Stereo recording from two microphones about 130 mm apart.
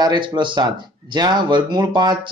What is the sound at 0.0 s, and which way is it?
Speech, 35° right (ahead or behind).